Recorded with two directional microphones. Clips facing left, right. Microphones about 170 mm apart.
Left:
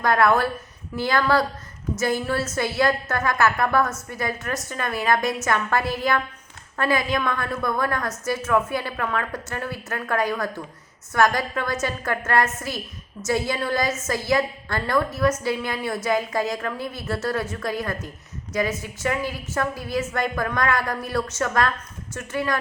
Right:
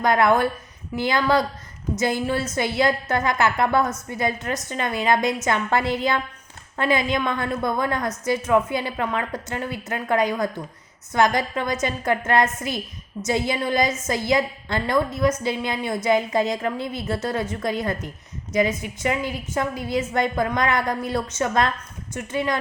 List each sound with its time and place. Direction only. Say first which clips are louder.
0.0 s a woman's voice: right 1 dB; 20° right (ahead or behind)